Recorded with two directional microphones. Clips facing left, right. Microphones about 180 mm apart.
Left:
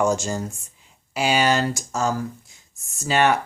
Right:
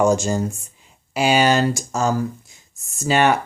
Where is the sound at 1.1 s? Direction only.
15° right (ahead or behind).